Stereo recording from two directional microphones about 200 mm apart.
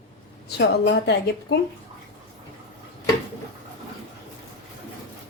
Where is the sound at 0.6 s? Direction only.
55° left (ahead or behind).